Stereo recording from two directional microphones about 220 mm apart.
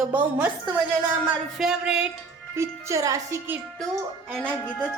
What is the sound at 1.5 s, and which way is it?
A woman's voice, 5° right (ahead or behind).